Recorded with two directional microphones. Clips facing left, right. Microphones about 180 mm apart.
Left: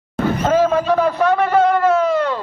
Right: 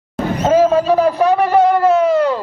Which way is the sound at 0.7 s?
30° right (ahead or behind).